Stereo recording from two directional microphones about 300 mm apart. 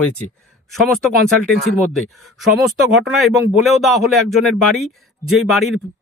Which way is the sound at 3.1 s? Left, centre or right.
Centre.